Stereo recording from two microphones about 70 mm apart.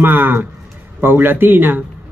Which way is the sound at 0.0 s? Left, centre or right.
Right.